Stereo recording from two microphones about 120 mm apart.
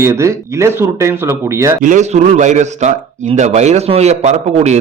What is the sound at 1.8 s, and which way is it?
Speech, 85° right.